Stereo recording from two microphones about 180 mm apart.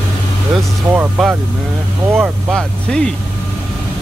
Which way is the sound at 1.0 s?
5° right (ahead or behind).